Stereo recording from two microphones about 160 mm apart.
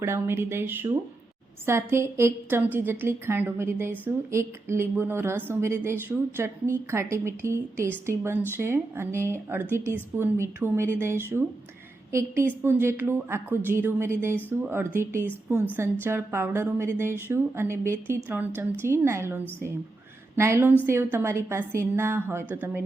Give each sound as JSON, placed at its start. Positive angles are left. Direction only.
{"t": 0.0, "sound": "a woman's voice", "side_deg": -15}